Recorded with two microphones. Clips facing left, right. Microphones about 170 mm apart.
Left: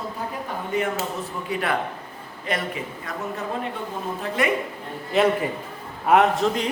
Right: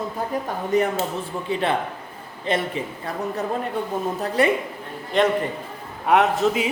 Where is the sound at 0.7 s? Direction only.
40° right (ahead or behind).